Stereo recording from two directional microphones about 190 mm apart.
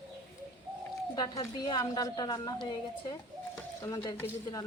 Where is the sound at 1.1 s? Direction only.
20° left (ahead or behind).